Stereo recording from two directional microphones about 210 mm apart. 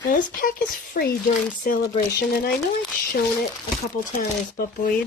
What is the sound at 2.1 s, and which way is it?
Speech, 45° left (ahead or behind).